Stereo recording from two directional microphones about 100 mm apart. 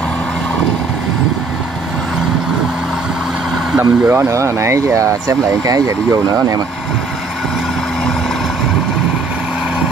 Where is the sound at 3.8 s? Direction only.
30° right (ahead or behind).